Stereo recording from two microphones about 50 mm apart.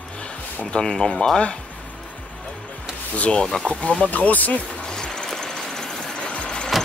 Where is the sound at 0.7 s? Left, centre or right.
Centre.